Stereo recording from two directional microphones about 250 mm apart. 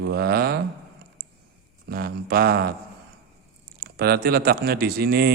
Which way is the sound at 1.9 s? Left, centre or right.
Right.